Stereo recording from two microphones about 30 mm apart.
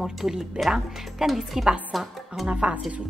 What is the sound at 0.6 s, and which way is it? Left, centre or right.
Speech, right.